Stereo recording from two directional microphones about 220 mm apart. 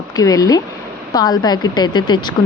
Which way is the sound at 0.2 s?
15° left (ahead or behind).